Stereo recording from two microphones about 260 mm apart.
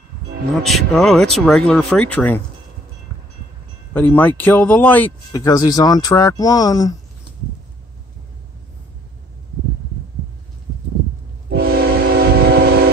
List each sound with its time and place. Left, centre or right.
0.7 s speech: centre
3.9 s speech: centre
11.4 s train: right